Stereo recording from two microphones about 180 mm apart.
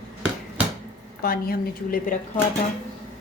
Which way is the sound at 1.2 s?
55° left (ahead or behind).